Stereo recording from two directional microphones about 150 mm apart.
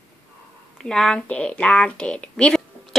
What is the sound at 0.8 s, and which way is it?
Speech, 5° left (ahead or behind).